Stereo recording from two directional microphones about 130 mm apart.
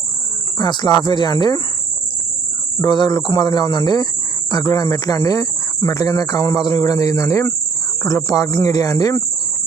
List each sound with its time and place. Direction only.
0.6 s speech: 35° left (ahead or behind)
2.7 s speech: 35° left (ahead or behind)